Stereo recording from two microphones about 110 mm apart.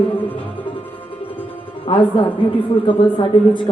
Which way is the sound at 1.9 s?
50° left (ahead or behind).